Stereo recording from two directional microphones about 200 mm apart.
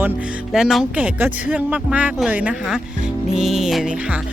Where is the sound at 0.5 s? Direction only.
Centre (ahead or behind).